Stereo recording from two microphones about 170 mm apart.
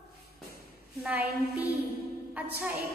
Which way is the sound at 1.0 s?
10° right (ahead or behind).